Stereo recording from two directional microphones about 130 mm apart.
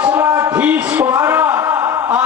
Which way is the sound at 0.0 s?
15° right (ahead or behind).